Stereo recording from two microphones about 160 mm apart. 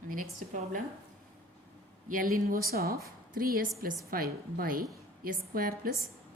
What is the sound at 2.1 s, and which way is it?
A woman's voice, 55° right (ahead or behind).